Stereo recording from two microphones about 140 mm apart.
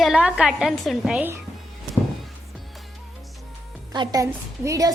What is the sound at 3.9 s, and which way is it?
A woman's voice, 30° right (ahead or behind).